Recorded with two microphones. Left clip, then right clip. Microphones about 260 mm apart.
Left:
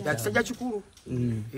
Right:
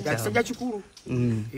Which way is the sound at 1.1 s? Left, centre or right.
Right.